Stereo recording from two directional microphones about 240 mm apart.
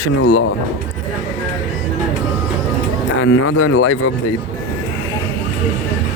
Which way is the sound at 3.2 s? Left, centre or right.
Left.